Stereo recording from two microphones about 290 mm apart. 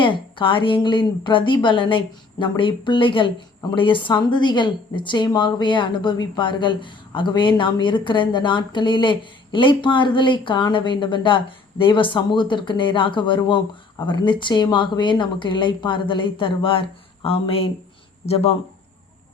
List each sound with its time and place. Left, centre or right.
0.0 s speech: centre